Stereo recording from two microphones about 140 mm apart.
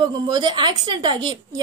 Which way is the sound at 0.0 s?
35° right (ahead or behind).